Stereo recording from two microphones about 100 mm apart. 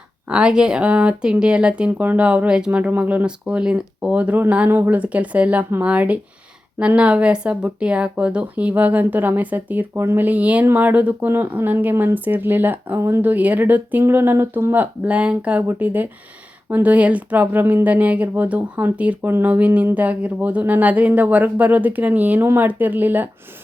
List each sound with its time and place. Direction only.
0.3 s speech: 10° right (ahead or behind)